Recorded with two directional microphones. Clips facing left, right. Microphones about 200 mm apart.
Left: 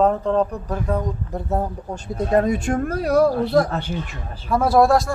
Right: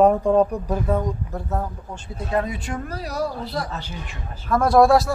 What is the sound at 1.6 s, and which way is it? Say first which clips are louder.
Speech: left 4 dB; 40° left (ahead or behind).